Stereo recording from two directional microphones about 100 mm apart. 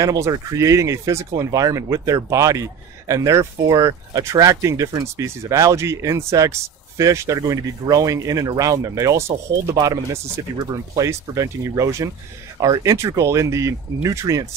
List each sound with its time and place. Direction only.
0.0 s speech: 35° right (ahead or behind)
10.7 s speech: 35° right (ahead or behind)